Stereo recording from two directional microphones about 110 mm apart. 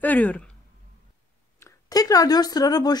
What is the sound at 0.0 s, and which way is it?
Speech, 15° left (ahead or behind).